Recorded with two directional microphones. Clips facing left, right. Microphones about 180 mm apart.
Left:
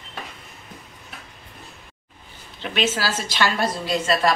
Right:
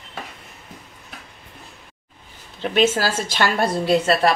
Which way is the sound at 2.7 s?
50° right (ahead or behind).